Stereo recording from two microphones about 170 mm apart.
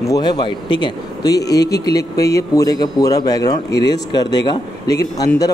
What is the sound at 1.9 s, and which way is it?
Speech, 20° left (ahead or behind).